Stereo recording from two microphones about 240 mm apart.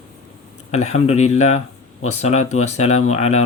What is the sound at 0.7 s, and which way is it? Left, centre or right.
Speech, left.